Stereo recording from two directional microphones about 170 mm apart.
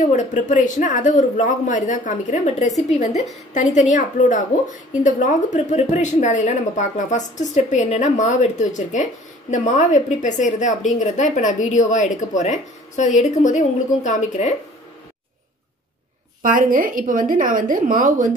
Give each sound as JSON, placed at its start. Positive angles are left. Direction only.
{"t": 0.0, "sound": "a woman's voice", "side_deg": 45}
{"t": 16.4, "sound": "a woman's voice", "side_deg": -55}